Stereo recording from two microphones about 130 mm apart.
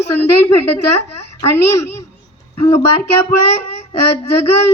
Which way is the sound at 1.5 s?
20° left (ahead or behind).